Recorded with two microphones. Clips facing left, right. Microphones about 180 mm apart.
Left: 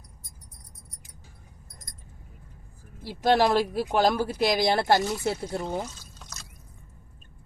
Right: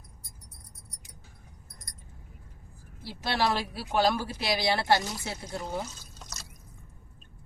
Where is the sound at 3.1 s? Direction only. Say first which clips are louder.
Left 7 dB; 45° left (ahead or behind).